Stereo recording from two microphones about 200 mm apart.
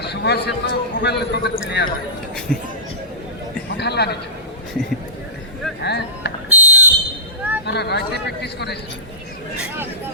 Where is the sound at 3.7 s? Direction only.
55° left (ahead or behind).